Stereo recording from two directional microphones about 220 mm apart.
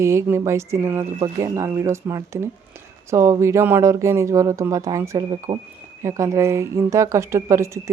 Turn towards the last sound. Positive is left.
turn(degrees=-15)  # may be behind; listen again after turning